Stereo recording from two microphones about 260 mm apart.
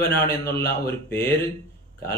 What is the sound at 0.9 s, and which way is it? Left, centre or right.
Speech, centre.